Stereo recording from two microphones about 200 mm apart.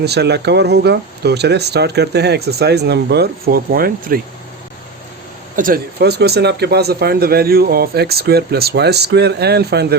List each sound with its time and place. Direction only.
0.0 s speech: 55° right (ahead or behind)
5.5 s speech: 45° right (ahead or behind)